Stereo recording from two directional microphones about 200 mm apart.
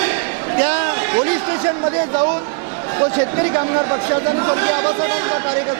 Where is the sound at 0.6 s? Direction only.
15° right (ahead or behind).